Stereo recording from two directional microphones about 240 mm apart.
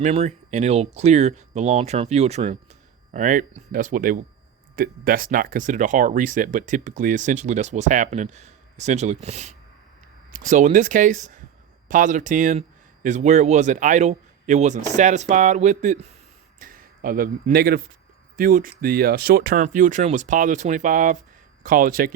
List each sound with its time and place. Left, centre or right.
0.0 s a man's voice: right